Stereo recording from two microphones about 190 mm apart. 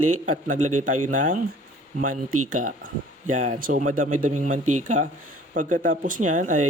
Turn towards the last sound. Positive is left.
turn(degrees=-40)  # may be behind; listen again after turning